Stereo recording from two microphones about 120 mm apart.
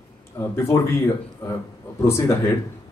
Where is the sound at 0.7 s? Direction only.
25° left (ahead or behind).